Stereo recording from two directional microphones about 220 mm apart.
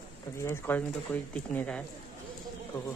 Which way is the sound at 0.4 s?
10° left (ahead or behind).